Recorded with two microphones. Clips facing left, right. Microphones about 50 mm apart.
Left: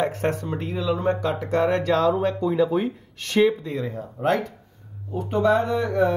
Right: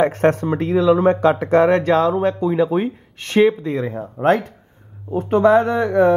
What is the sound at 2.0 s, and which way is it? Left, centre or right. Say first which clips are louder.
Speech: right 4 dB; right.